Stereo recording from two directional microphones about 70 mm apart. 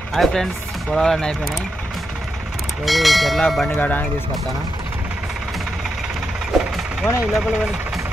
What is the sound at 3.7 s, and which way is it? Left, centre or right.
Speech, left.